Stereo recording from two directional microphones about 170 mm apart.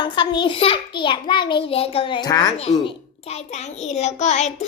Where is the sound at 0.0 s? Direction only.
25° left (ahead or behind).